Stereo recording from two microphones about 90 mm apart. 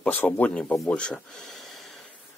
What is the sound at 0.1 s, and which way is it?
Speech, 20° left (ahead or behind).